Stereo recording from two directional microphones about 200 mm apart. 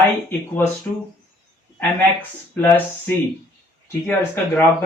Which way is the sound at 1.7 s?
10° left (ahead or behind).